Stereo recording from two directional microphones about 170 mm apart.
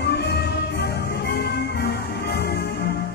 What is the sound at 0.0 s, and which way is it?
Music, 80° left.